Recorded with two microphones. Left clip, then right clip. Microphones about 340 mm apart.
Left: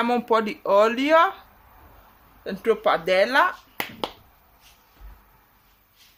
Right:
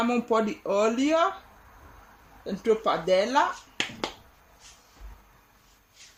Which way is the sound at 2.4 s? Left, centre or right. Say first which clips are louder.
Left 4 dB; left.